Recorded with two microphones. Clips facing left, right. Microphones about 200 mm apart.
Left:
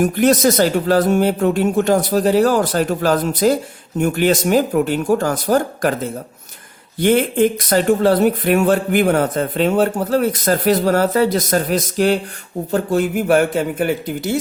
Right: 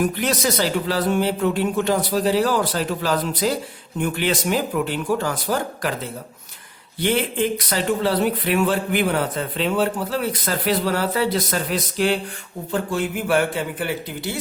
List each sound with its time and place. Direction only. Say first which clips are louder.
0.0 s speech: left 8 dB; 45° left (ahead or behind)
7.0 s speech: left 7 dB; 50° left (ahead or behind)